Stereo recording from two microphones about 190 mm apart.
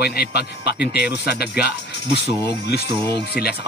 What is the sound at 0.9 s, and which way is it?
Speech, 55° left (ahead or behind).